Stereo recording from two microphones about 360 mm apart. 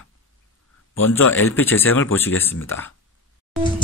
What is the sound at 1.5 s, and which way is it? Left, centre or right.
Speech, centre.